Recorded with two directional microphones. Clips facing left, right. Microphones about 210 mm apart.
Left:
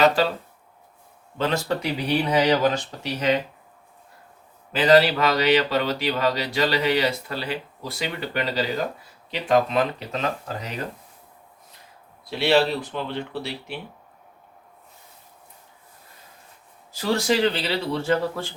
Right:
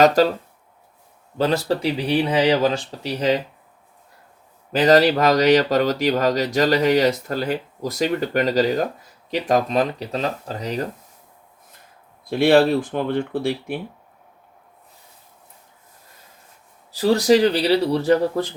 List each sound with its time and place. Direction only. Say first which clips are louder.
0.2 s speech: right 6 dB; 40° right (ahead or behind)
1.4 s speech: right 4 dB; 35° right (ahead or behind)
4.7 s speech: right 2 dB; 40° right (ahead or behind)
12.2 s speech: right 5 dB; 50° right (ahead or behind)
16.9 s speech: right 7 dB; 35° right (ahead or behind)